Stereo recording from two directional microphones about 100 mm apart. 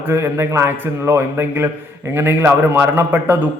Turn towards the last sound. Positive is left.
turn(degrees=-20)  # may be behind; listen again after turning